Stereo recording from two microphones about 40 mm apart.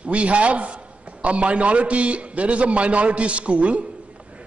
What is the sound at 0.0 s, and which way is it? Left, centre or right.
A man's voice, right.